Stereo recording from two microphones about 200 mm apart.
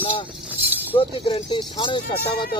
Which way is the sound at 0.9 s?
25° left (ahead or behind).